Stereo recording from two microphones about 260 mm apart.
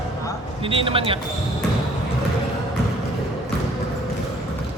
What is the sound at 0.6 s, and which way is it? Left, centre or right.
Speech, right.